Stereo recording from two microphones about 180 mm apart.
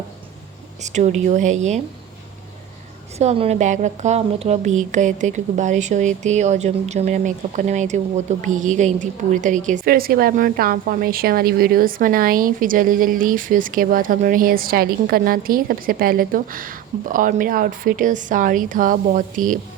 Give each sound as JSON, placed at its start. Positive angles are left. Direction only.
{"t": 0.8, "sound": "a woman's voice", "side_deg": -40}
{"t": 3.2, "sound": "a woman's voice", "side_deg": -35}